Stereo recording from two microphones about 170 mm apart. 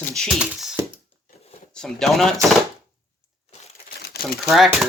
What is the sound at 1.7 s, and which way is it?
Speech, 5° left (ahead or behind).